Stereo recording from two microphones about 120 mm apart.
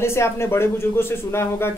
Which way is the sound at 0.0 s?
20° left (ahead or behind).